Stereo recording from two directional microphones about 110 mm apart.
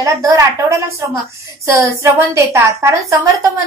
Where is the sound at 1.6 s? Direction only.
25° right (ahead or behind).